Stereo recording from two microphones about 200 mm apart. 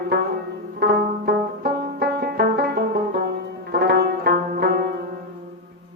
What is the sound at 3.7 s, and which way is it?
Music, 50° right (ahead or behind).